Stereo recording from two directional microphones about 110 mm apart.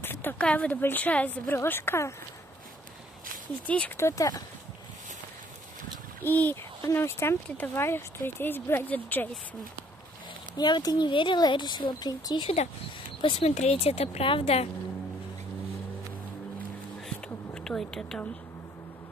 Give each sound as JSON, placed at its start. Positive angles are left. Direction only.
{"t": 0.0, "sound": "speech", "side_deg": 20}
{"t": 3.6, "sound": "speech", "side_deg": 10}
{"t": 3.9, "sound": "speech", "side_deg": 30}
{"t": 6.2, "sound": "speech", "side_deg": 15}
{"t": 10.6, "sound": "speech", "side_deg": 40}
{"t": 13.2, "sound": "speech", "side_deg": 55}
{"t": 13.6, "sound": "speech", "side_deg": 75}
{"t": 17.6, "sound": "speech", "side_deg": 5}